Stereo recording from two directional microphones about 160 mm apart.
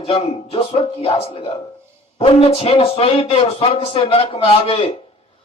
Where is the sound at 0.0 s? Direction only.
35° left (ahead or behind).